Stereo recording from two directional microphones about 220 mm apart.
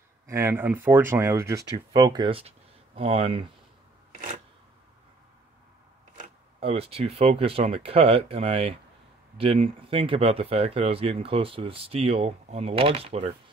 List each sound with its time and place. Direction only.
0.3 s speech: 10° right (ahead or behind)
6.1 s speech: 25° right (ahead or behind)